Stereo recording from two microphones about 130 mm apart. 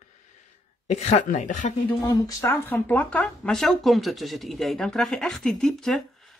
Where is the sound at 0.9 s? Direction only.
60° left (ahead or behind).